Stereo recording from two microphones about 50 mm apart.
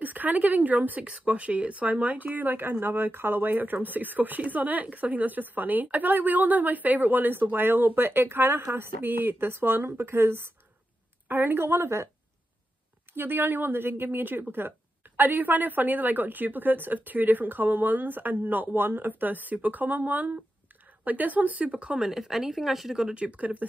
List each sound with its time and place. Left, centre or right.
0.0 s speech: right
13.1 s speech: right
21.9 s speech: centre
23.1 s speech: right